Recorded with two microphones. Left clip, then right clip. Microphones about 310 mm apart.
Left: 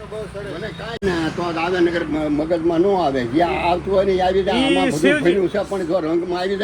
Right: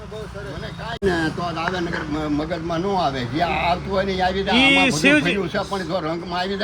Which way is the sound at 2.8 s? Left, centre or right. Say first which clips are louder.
Left 4 dB; centre.